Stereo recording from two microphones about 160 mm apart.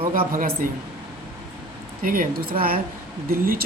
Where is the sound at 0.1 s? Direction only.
55° right (ahead or behind).